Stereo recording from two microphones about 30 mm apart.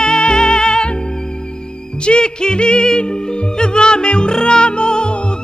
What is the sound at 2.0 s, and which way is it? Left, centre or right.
Music, left.